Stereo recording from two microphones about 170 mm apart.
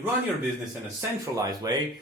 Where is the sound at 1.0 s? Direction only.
20° right (ahead or behind).